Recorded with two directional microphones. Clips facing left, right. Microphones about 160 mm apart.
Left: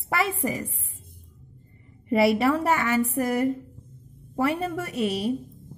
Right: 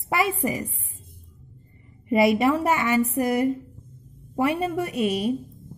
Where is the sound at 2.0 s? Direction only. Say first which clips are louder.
Right 1 dB; 15° right (ahead or behind).